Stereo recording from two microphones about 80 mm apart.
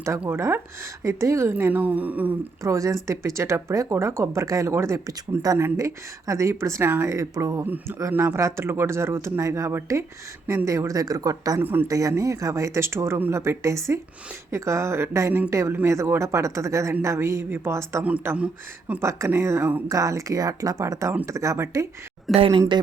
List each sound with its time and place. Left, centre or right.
0.3 s speech: right
2.6 s speech: right
7.6 s speech: right
11.6 s speech: right
11.9 s speech: right
18.3 s speech: centre
18.9 s speech: right
22.3 s speech: centre